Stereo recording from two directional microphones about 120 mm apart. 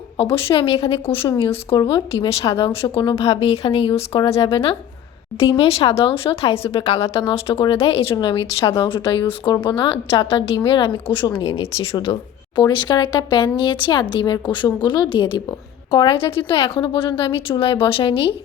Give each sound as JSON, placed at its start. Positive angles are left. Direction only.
{"t": 0.2, "sound": "speech", "side_deg": 50}
{"t": 3.2, "sound": "speech", "side_deg": 60}
{"t": 8.1, "sound": "speech", "side_deg": 35}
{"t": 8.9, "sound": "speech", "side_deg": 50}
{"t": 11.6, "sound": "speech", "side_deg": 55}
{"t": 12.5, "sound": "speech", "side_deg": 40}